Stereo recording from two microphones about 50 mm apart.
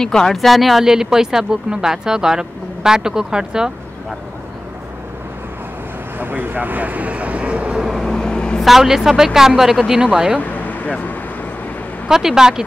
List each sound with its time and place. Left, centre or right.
0.0 s speech: centre
6.1 s speech: right
8.1 s vehicle: centre
8.6 s speech: centre
10.4 s vehicle: left
12.1 s speech: centre